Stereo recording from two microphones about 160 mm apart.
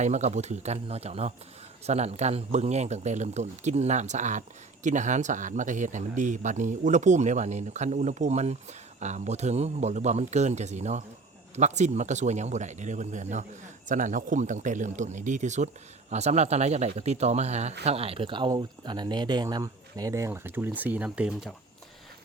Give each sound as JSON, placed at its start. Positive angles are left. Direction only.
{"t": 0.0, "sound": "speech", "side_deg": -45}